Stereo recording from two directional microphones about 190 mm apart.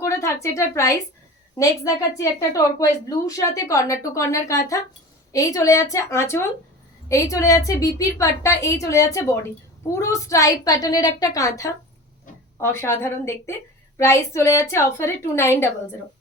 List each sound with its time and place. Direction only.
0.0 s a woman's voice: 15° left (ahead or behind)